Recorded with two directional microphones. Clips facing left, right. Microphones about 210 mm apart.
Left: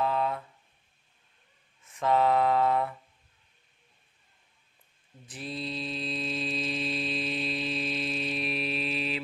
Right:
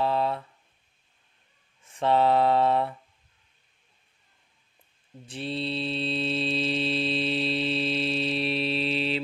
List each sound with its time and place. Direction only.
0.0 s a sound: 30° right (ahead or behind)
1.9 s mantra: 30° right (ahead or behind)
5.2 s mantra: 30° right (ahead or behind)